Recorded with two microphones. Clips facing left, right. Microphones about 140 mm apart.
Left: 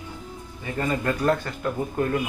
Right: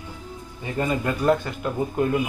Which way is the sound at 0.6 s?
15° right (ahead or behind).